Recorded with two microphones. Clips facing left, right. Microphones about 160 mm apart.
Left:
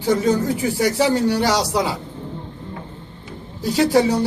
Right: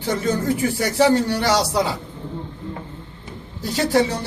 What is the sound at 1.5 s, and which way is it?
Speech, 10° left (ahead or behind).